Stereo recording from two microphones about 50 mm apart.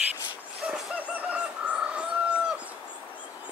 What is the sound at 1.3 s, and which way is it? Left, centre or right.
Chicken, right.